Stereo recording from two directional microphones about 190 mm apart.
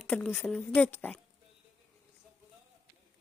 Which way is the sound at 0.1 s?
5° left (ahead or behind).